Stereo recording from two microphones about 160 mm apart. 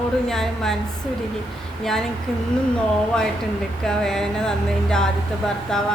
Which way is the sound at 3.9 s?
5° left (ahead or behind).